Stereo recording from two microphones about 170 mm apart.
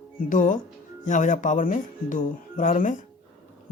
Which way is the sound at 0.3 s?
50° left (ahead or behind).